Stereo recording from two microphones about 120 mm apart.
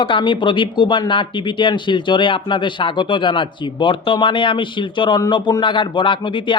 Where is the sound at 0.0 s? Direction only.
45° left (ahead or behind).